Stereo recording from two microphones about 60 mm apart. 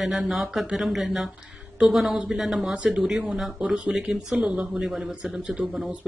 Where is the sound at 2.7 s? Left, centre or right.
Centre.